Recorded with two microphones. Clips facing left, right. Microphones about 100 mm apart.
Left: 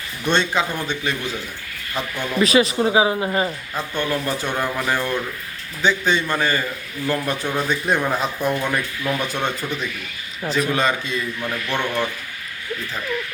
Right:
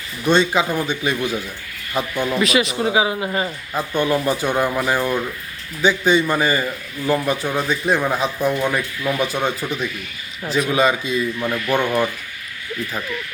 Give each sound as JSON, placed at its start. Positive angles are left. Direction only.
{"t": 0.3, "sound": "a man's voice", "side_deg": -5}
{"t": 2.4, "sound": "speech", "side_deg": 35}
{"t": 3.8, "sound": "a man's voice", "side_deg": -15}